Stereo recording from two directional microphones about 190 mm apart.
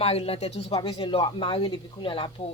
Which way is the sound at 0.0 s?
30° left (ahead or behind).